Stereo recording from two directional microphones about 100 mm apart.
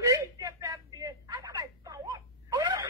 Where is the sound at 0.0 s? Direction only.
35° right (ahead or behind).